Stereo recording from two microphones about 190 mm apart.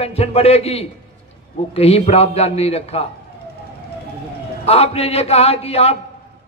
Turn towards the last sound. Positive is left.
turn(degrees=30)  # may be behind; listen again after turning